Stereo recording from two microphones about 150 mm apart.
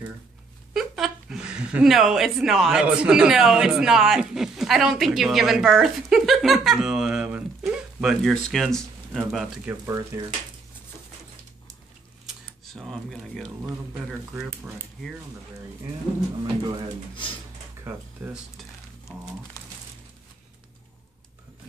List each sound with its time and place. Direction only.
0.7 s speech: 5° right (ahead or behind)
9.7 s speech: 20° right (ahead or behind)
12.3 s a sound: centre (ahead or behind)
14.0 s speech: 5° right (ahead or behind)
17.8 s speech: 15° right (ahead or behind)
18.6 s frying: 5° right (ahead or behind)
19.6 s crumpling: 25° left (ahead or behind)